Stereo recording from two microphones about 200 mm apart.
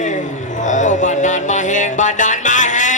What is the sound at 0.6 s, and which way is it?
Music, 40° left (ahead or behind).